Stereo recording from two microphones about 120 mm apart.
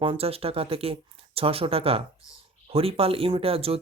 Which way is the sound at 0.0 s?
50° right (ahead or behind).